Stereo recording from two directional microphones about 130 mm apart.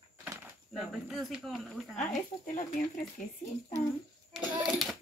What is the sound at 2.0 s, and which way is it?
Speech, 70° left (ahead or behind).